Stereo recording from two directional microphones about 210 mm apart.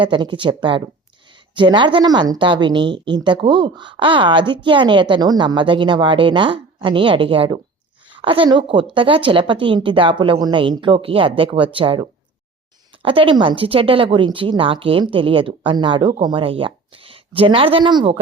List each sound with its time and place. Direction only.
0.0 s a woman's voice: 20° right (ahead or behind)